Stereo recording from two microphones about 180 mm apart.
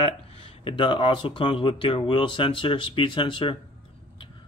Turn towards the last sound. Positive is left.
turn(degrees=25)  # may be behind; listen again after turning